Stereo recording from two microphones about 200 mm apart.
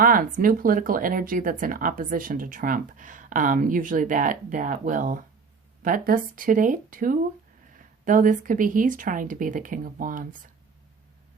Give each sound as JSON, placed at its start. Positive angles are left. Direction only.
{"t": 0.0, "sound": "speech", "side_deg": -45}